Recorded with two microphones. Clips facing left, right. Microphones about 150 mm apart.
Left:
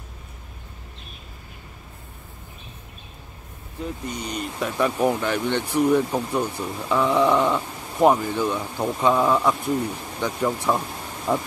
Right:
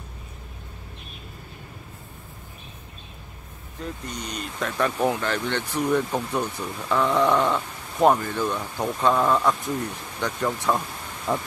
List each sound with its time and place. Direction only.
3.8 s speech: 10° left (ahead or behind)